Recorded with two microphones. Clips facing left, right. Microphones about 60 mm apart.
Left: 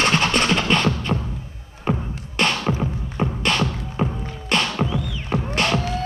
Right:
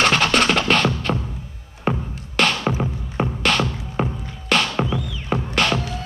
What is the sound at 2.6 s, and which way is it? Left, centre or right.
Music, centre.